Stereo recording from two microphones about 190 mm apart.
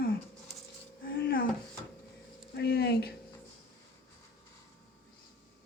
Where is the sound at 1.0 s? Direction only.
50° left (ahead or behind).